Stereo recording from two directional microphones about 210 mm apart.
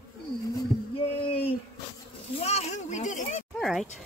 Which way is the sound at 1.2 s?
25° left (ahead or behind).